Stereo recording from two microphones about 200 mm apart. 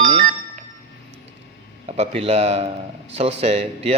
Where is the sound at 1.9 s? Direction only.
30° right (ahead or behind).